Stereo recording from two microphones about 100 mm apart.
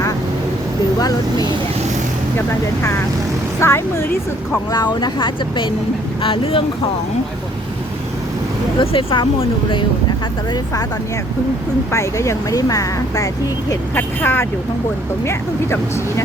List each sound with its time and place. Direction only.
0.9 s speech: 40° left (ahead or behind)
3.6 s speech: 25° left (ahead or behind)
4.7 s speech: 45° left (ahead or behind)
6.2 s speech: 65° left (ahead or behind)
8.8 s speech: 65° left (ahead or behind)
11.9 s speech: 30° left (ahead or behind)
13.9 s speech: 20° left (ahead or behind)